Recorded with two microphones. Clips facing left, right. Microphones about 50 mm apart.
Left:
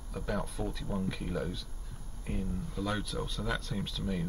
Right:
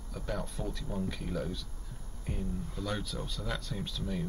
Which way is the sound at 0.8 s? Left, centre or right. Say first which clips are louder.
Left 1 dB; centre.